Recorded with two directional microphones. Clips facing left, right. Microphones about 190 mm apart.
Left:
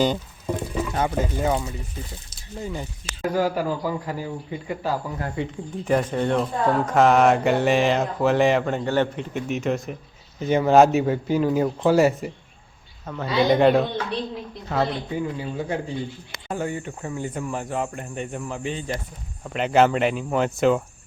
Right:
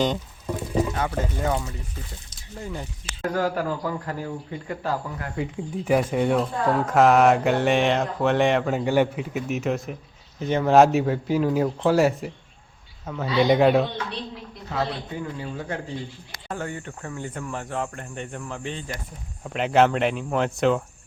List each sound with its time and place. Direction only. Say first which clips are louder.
0.0 s pour: left 2 dB; 5° left (ahead or behind)
0.7 s a sound: right 3 dB; 30° right (ahead or behind)
0.9 s speech: left 3 dB; 20° left (ahead or behind)
1.2 s speech: left 2 dB; 5° left (ahead or behind)
5.4 s speech: even; 5° right (ahead or behind)
15.2 s speech: left 4 dB; 15° left (ahead or behind)